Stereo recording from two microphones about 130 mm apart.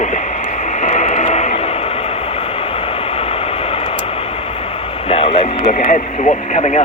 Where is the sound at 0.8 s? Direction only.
65° left (ahead or behind).